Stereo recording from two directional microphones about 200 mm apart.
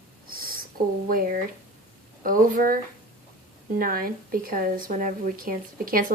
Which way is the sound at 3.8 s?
45° right (ahead or behind).